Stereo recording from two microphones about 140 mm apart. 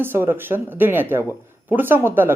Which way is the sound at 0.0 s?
15° right (ahead or behind).